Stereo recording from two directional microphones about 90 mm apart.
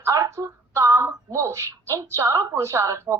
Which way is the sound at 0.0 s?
35° right (ahead or behind).